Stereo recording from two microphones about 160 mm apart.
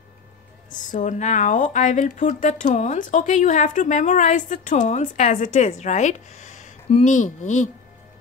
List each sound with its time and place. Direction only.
0.7 s speech: 55° left (ahead or behind)